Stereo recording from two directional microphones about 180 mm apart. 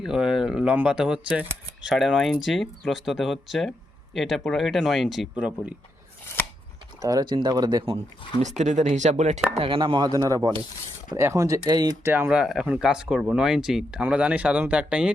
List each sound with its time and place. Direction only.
0.0 s speech: 5° right (ahead or behind)
7.0 s speech: 20° right (ahead or behind)
8.4 s speech: 40° right (ahead or behind)
9.6 s speech: 30° right (ahead or behind)
12.1 s speech: 10° right (ahead or behind)